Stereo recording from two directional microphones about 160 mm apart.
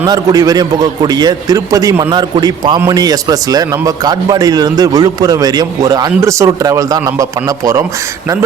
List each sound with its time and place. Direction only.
0.0 s a man's voice: 25° right (ahead or behind)